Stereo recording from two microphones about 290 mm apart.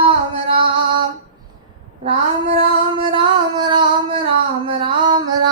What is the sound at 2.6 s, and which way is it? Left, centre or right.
Female singing, centre.